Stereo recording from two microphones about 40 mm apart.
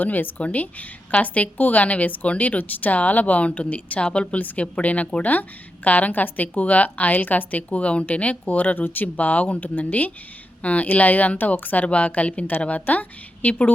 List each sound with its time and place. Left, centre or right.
0.0 s a woman's voice: left
4.4 s speech: left
4.6 s a woman's voice: left
9.1 s a woman's voice: left
11.9 s a woman's voice: left